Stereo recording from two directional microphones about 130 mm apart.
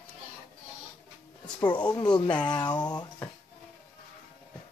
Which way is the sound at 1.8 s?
30° left (ahead or behind).